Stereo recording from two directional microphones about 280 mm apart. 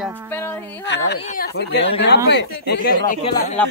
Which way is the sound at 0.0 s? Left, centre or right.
Centre.